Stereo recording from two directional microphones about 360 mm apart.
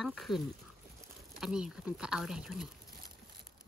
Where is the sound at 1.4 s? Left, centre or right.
Centre.